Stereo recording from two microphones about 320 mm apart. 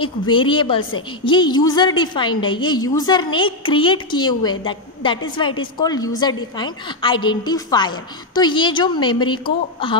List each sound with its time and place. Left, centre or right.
0.0 s a woman's voice: centre